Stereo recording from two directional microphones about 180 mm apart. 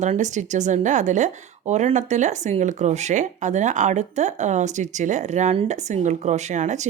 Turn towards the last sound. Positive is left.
turn(degrees=-40)  # may be behind; listen again after turning